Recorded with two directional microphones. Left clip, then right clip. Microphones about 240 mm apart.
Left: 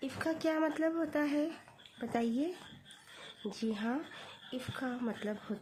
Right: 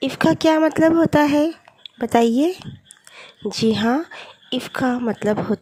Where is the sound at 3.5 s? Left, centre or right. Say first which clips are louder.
Right 19 dB; right.